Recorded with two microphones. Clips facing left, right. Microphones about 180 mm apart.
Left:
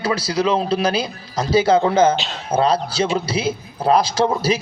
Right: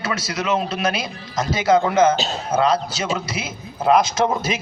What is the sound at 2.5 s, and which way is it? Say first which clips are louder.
A man's voice: left 2 dB; 30° left (ahead or behind).